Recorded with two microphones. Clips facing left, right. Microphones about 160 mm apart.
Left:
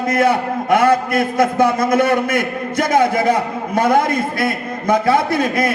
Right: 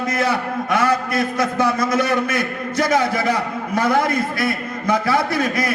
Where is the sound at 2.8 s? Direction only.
50° left (ahead or behind).